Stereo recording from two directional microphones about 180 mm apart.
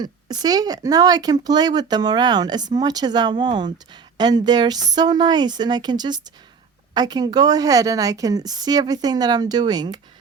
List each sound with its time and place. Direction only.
0.0 s speech: 20° right (ahead or behind)